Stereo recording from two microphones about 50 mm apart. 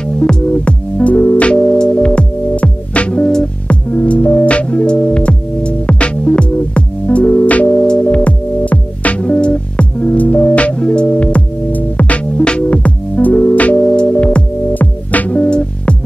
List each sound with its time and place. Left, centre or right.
0.0 s music: centre; by 1.5 s left
1.5 s music: centre
3.6 s music: left